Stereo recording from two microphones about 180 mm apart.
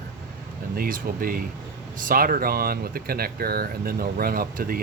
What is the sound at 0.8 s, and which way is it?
Speech, 50° right (ahead or behind).